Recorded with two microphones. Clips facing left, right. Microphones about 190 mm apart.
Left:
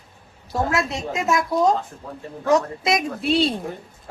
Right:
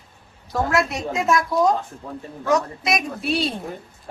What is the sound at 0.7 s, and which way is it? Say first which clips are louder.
A woman's voice: right 2 dB; 25° left (ahead or behind).